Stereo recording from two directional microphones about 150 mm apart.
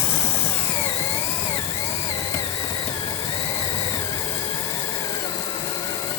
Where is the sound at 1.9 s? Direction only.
20° left (ahead or behind).